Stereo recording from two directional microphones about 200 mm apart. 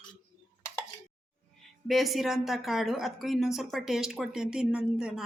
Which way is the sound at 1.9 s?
Centre (ahead or behind).